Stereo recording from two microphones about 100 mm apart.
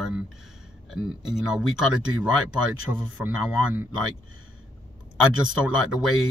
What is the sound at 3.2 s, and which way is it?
Speech, 15° right (ahead or behind).